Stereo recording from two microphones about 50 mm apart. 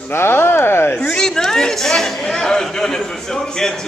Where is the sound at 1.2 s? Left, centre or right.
Centre.